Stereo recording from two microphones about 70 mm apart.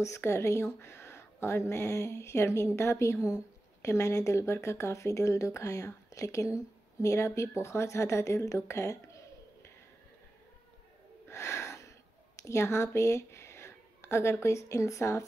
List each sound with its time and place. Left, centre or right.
0.0 s a woman's voice: left
11.2 s wheeze: left
12.4 s a sound: left
14.4 s speech: left